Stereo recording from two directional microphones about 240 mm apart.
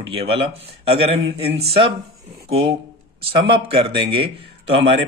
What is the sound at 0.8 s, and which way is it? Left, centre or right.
Speech, right.